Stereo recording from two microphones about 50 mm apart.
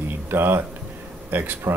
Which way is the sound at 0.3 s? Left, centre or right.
Right.